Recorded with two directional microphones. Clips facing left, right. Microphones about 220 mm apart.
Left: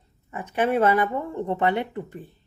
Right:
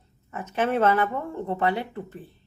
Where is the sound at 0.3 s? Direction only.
15° left (ahead or behind).